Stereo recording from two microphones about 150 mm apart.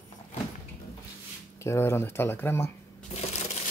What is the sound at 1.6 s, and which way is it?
Speech, 15° left (ahead or behind).